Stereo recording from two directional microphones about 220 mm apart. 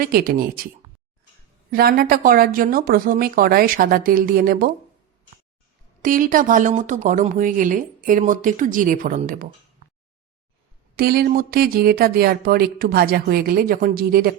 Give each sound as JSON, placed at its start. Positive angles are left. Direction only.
{"t": 0.0, "sound": "speech", "side_deg": -40}
{"t": 1.7, "sound": "speech", "side_deg": -40}
{"t": 6.0, "sound": "speech", "side_deg": -40}
{"t": 10.9, "sound": "speech", "side_deg": -45}